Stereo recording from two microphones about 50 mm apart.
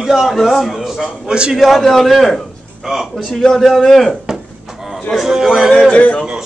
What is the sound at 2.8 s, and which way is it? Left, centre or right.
Speech, centre.